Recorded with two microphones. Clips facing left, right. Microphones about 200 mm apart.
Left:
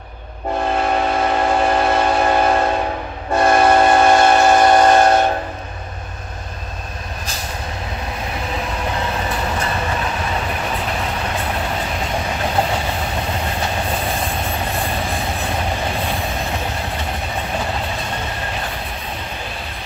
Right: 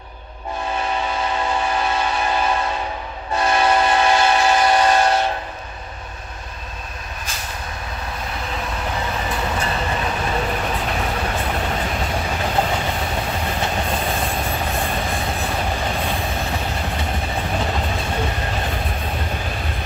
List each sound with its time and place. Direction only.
0.7 s train: 55° left (ahead or behind)